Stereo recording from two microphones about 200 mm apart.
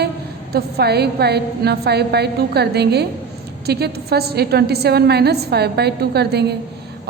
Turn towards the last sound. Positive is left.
turn(degrees=-55)  # may be behind; listen again after turning